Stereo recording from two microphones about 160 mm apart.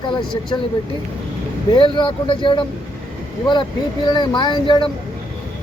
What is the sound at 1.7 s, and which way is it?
Speech, 30° left (ahead or behind).